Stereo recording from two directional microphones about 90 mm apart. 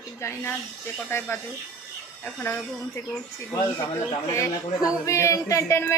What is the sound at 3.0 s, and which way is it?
Child singing, 30° left (ahead or behind).